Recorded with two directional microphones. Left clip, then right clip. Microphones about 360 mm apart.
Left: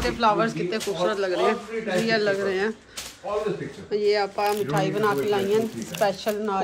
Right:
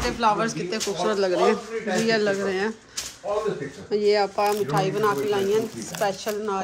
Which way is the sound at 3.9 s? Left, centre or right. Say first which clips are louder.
Right 2 dB; centre.